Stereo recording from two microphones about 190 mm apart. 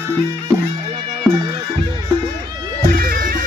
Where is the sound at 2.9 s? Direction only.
50° right (ahead or behind).